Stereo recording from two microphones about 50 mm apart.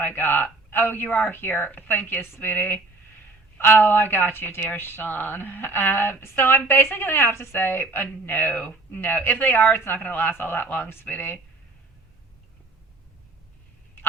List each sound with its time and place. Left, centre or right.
0.0 s speech: left
7.6 s speech: left